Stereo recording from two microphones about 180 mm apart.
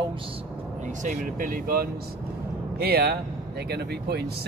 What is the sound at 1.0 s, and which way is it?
Speech, 50° right (ahead or behind).